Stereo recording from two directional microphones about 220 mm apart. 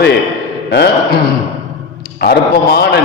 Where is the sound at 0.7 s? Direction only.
45° left (ahead or behind).